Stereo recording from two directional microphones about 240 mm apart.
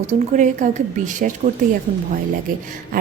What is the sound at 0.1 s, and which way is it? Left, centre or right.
A woman's voice, right.